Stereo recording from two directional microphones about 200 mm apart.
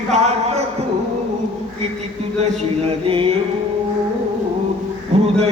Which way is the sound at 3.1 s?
30° right (ahead or behind).